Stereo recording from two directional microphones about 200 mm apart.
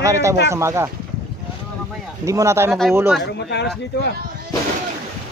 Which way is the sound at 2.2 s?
15° right (ahead or behind).